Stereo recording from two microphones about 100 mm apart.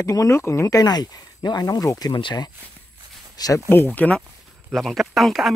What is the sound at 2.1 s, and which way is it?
Speech, 50° left (ahead or behind).